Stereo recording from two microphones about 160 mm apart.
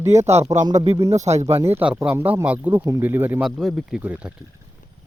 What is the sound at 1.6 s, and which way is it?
Speech, 15° right (ahead or behind).